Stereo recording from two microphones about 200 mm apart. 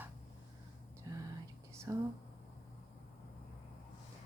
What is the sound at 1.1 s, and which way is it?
Whispering, 20° right (ahead or behind).